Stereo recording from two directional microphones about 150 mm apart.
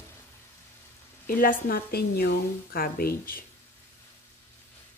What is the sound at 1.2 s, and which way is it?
A woman's voice, 70° left (ahead or behind).